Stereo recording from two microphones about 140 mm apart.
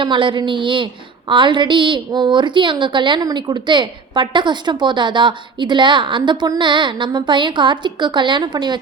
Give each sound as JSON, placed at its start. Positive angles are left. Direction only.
{"t": 0.0, "sound": "a woman's voice", "side_deg": -35}